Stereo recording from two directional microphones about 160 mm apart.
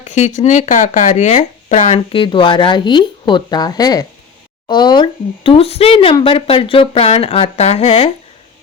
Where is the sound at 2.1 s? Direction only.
35° left (ahead or behind).